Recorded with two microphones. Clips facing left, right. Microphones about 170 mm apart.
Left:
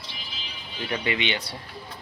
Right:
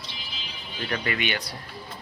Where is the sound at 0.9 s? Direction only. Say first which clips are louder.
Left 1 dB; 20° left (ahead or behind).